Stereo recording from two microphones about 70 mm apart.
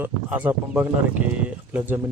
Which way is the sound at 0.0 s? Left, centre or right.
Right.